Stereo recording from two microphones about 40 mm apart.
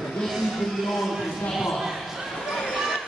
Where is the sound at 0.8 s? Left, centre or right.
Centre.